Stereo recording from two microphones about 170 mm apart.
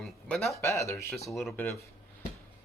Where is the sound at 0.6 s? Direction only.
15° left (ahead or behind).